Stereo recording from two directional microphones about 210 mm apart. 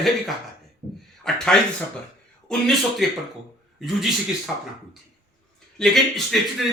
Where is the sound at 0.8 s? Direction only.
30° right (ahead or behind).